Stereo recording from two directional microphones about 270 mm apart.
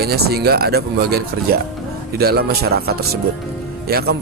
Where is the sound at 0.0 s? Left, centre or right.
Right.